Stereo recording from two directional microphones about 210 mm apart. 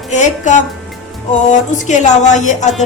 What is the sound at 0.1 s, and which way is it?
Music, 35° left (ahead or behind).